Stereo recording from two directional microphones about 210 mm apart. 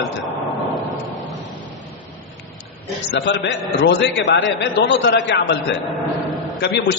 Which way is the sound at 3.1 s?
55° left (ahead or behind).